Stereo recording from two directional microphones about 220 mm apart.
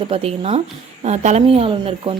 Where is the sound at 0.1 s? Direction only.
25° right (ahead or behind).